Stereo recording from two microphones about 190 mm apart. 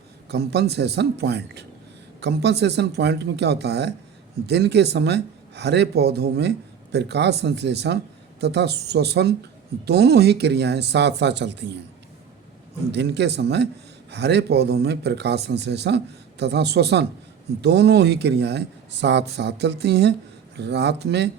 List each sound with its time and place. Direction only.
0.3 s speech: 60° right (ahead or behind)
12.9 s speech: 65° right (ahead or behind)